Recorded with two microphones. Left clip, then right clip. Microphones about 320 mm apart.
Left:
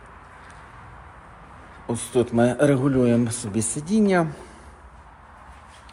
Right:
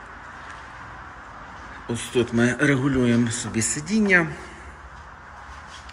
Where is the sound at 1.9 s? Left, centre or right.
Centre.